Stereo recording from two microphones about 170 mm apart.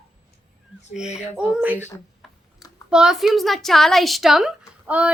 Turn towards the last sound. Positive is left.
turn(degrees=-5)  # may be behind; listen again after turning